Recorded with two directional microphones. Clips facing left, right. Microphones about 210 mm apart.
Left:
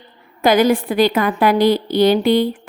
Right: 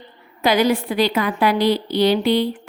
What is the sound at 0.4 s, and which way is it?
A woman's voice, 50° left (ahead or behind).